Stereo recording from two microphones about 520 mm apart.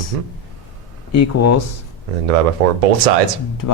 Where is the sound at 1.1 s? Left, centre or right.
Left.